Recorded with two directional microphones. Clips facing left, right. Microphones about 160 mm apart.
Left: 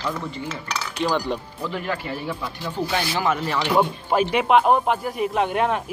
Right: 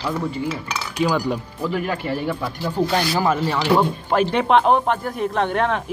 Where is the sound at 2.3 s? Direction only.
50° right (ahead or behind).